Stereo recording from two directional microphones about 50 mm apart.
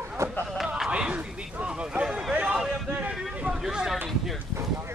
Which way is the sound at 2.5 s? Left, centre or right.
Centre.